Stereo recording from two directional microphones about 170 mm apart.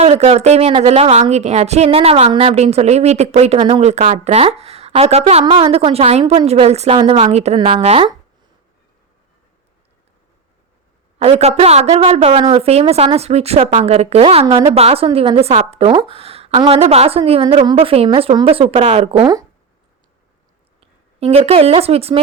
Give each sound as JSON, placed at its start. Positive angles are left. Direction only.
{"t": 0.0, "sound": "a woman's voice", "side_deg": -40}
{"t": 11.2, "sound": "a woman's voice", "side_deg": -40}
{"t": 20.8, "sound": "speech", "side_deg": -35}